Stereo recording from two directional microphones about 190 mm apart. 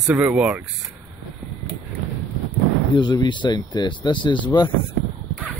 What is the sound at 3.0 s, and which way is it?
Speech, 25° left (ahead or behind).